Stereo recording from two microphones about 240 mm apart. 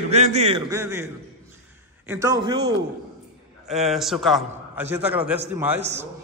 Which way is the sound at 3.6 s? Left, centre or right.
Centre.